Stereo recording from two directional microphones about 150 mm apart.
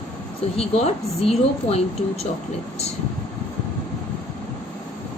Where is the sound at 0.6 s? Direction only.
40° left (ahead or behind).